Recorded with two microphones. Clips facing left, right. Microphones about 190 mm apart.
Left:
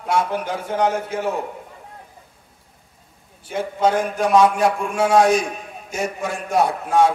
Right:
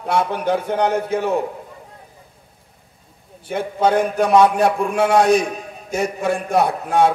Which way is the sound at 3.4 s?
60° right (ahead or behind).